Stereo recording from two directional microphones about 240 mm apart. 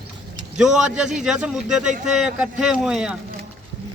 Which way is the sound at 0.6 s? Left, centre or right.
Centre.